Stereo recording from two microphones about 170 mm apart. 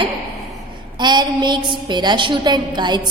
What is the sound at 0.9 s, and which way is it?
A woman's voice, 25° right (ahead or behind).